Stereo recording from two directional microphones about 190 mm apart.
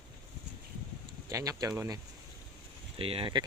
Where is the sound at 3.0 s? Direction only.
30° right (ahead or behind).